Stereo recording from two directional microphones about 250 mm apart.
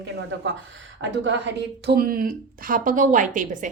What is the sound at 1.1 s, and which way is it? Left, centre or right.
A woman's voice, right.